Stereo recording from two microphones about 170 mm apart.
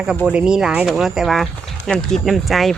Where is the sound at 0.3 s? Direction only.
5° right (ahead or behind).